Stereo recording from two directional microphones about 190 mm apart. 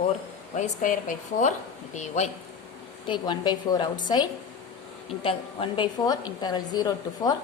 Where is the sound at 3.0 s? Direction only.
25° left (ahead or behind).